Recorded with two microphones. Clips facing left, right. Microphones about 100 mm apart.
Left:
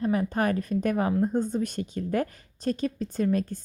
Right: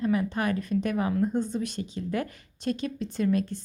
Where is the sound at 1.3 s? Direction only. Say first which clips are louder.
Left 2 dB; 45° left (ahead or behind).